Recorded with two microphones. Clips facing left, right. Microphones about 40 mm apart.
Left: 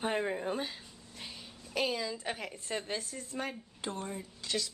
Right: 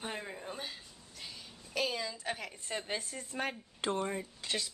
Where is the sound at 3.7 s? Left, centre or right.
Right.